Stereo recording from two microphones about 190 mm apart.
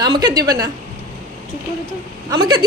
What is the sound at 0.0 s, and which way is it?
Speech, 20° right (ahead or behind).